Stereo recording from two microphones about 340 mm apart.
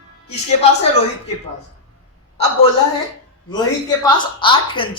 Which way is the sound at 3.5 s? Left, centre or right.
Centre.